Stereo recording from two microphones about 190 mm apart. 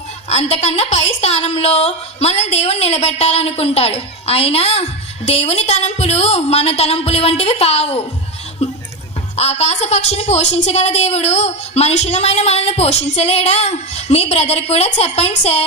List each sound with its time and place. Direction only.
0.3 s a woman's voice: 35° left (ahead or behind)